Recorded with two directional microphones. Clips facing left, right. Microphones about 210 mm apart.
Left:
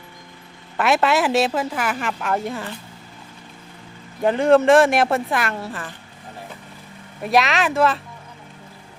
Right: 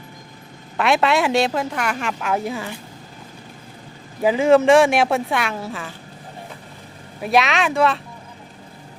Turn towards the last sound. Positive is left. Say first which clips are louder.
# even
turn(degrees=0)  # may be behind; listen again after turning